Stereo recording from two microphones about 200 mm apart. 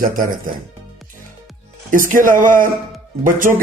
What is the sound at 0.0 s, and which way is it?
Speech, 45° right (ahead or behind).